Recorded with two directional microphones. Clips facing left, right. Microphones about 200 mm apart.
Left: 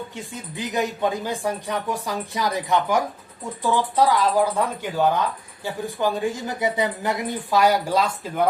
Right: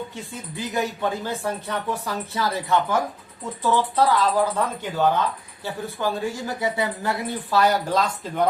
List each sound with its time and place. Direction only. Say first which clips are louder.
0.5 s speech: left 1 dB; 20° left (ahead or behind)